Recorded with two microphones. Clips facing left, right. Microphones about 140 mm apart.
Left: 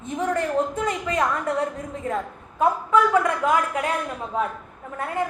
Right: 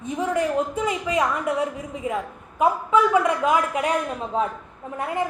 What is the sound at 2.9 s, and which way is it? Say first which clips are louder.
A woman's voice: right 1 dB; 20° right (ahead or behind).